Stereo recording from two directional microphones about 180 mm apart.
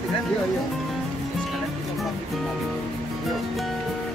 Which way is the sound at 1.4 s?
Centre (ahead or behind).